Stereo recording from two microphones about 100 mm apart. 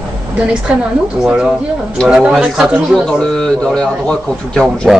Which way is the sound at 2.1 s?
10° right (ahead or behind).